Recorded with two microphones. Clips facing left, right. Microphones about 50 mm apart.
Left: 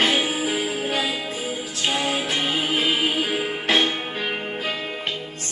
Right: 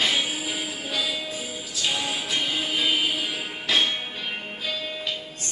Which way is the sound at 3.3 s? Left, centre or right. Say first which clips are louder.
Left 5 dB; left.